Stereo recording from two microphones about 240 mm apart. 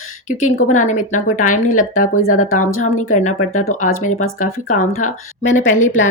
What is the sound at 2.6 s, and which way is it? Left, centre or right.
Speech, left.